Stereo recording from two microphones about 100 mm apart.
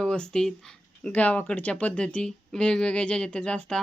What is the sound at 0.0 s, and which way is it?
Speech, 5° left (ahead or behind).